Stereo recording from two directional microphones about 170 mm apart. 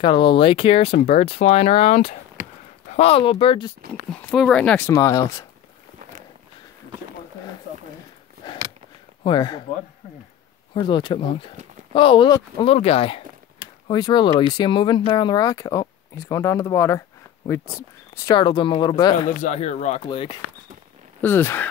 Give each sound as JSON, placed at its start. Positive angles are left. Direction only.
{"t": 0.0, "sound": "speech", "side_deg": 30}
{"t": 4.1, "sound": "speech", "side_deg": 5}
{"t": 4.9, "sound": "speech", "side_deg": 20}
{"t": 9.2, "sound": "speech", "side_deg": 25}
{"t": 10.7, "sound": "speech", "side_deg": 30}
{"t": 18.4, "sound": "speech", "side_deg": 25}
{"t": 19.2, "sound": "speech", "side_deg": 45}
{"t": 20.0, "sound": "speech", "side_deg": 30}
{"t": 21.2, "sound": "speech", "side_deg": 10}